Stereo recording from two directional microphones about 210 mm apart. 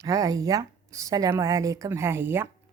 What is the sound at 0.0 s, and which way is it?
Speech, 15° right (ahead or behind).